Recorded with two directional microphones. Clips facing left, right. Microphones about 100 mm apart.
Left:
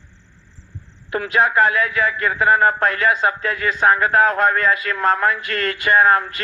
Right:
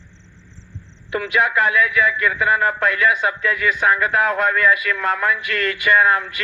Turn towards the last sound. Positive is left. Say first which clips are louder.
# left 2 dB
turn(degrees=40)  # may be behind; listen again after turning